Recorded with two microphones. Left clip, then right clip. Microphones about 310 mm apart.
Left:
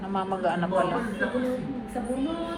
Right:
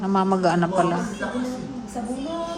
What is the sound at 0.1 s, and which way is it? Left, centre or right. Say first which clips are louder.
Speech: right 6 dB; centre.